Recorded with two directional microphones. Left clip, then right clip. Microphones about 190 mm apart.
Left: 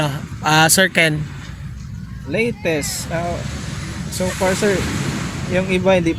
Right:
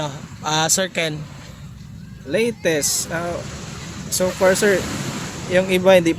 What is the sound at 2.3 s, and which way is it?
Speech, 45° right (ahead or behind).